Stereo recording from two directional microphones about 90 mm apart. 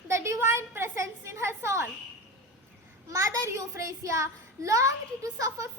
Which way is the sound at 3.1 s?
35° right (ahead or behind).